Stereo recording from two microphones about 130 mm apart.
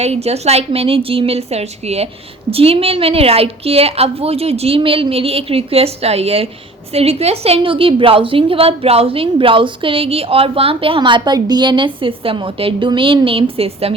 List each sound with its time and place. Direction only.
0.0 s a woman's voice: 55° right (ahead or behind)